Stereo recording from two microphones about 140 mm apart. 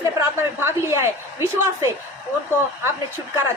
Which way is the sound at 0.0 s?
20° right (ahead or behind).